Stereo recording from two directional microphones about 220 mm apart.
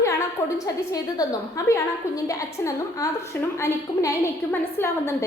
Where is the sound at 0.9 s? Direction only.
15° left (ahead or behind).